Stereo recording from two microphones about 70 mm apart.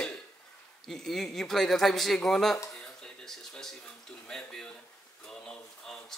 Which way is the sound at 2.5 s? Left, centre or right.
Centre.